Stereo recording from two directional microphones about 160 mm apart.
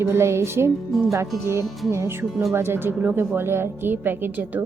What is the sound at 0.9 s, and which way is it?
Speech, centre (ahead or behind).